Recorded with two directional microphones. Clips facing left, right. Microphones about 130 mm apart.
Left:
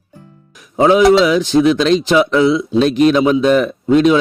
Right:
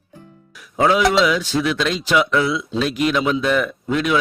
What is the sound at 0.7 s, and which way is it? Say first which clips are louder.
Mantra: left 6 dB; 20° left (ahead or behind).